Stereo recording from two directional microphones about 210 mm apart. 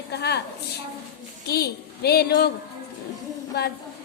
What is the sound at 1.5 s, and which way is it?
Speech, 50° left (ahead or behind).